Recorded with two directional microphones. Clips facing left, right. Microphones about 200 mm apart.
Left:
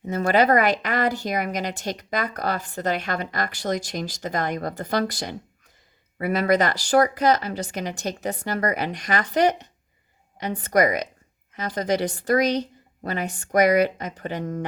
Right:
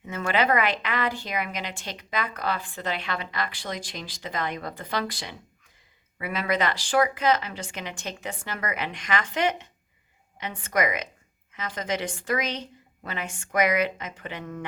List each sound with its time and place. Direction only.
0.0 s speech: 40° left (ahead or behind)